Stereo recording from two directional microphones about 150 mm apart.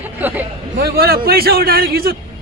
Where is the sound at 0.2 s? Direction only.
10° right (ahead or behind).